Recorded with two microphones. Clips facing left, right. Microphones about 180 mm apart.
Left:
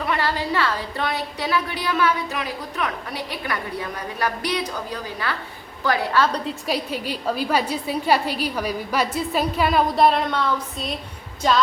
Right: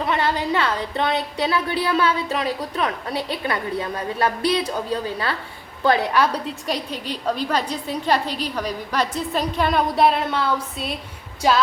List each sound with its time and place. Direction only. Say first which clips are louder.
0.0 s speech: right 2 dB; 20° right (ahead or behind)
6.1 s a woman's voice: right 1 dB; 5° right (ahead or behind)
6.7 s a woman's voice: left 2 dB; 5° left (ahead or behind)